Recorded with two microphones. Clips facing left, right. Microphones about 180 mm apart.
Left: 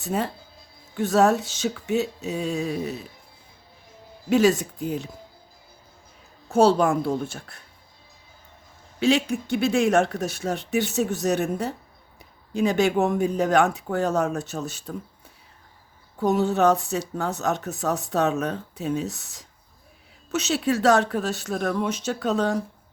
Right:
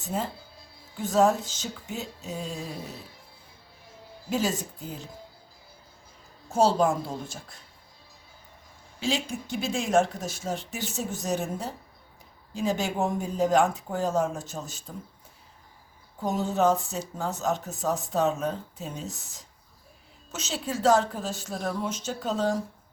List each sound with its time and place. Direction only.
0.0 s speech: 70° left (ahead or behind)
4.3 s speech: 70° left (ahead or behind)
6.5 s a woman's voice: 65° left (ahead or behind)
9.0 s speech: 65° left (ahead or behind)
16.2 s speech: 70° left (ahead or behind)